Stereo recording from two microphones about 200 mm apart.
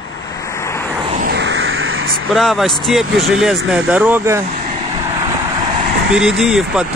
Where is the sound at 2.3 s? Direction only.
Centre (ahead or behind).